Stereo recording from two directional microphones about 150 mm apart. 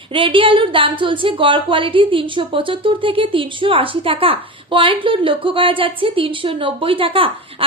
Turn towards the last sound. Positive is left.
turn(degrees=-35)  # may be behind; listen again after turning